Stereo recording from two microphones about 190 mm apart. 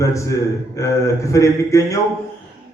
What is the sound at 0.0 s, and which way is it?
A man's voice, 15° left (ahead or behind).